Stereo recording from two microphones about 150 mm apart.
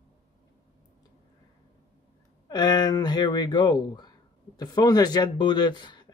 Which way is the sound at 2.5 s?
30° left (ahead or behind).